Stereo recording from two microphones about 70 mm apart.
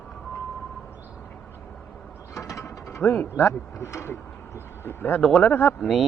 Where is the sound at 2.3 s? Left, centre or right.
Left.